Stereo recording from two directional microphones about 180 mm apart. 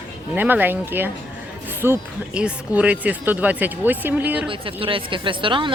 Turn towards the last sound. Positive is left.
turn(degrees=-30)  # may be behind; listen again after turning